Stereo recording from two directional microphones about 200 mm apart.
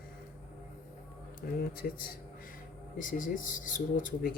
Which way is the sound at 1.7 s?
45° left (ahead or behind).